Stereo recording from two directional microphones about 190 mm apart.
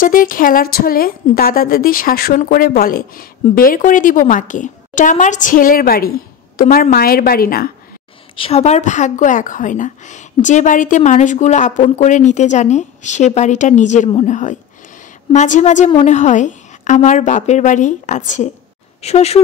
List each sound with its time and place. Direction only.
0.0 s a woman's voice: 45° left (ahead or behind)
8.4 s a woman's voice: 30° left (ahead or behind)